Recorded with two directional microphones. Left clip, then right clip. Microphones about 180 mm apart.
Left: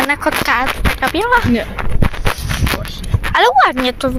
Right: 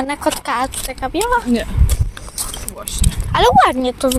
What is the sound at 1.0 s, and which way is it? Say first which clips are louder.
Speech: left 3 dB; centre (ahead or behind).